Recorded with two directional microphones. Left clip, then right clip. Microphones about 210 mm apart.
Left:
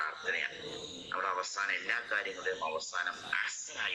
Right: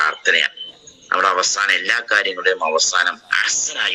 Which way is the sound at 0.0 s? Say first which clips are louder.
Right 18 dB; 50° right (ahead or behind).